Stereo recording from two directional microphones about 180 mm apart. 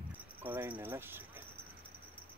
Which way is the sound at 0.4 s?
10° right (ahead or behind).